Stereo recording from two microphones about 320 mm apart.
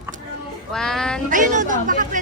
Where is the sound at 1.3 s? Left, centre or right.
Right.